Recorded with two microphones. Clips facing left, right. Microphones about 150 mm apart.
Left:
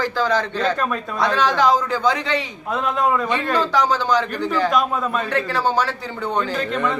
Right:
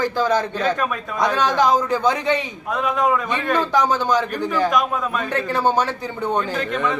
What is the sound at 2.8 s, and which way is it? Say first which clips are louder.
Speech: even; centre (ahead or behind).